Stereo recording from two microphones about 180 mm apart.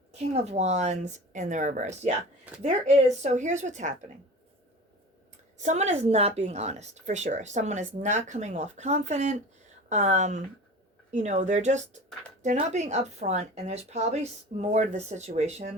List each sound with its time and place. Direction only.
0.1 s speech: 35° right (ahead or behind)
5.5 s speech: 40° right (ahead or behind)